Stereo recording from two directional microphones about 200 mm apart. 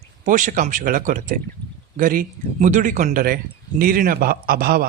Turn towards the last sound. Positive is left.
turn(degrees=-50)  # may be behind; listen again after turning